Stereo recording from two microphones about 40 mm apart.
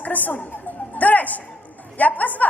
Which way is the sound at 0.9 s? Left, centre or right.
Left.